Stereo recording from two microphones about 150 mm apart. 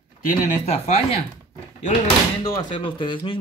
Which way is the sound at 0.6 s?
45° left (ahead or behind).